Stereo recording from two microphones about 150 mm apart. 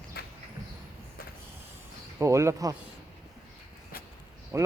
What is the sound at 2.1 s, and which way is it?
Speech, 20° right (ahead or behind).